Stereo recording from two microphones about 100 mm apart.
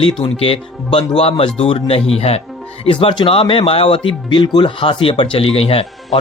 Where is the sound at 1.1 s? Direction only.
75° left (ahead or behind); by 2.4 s 90° left.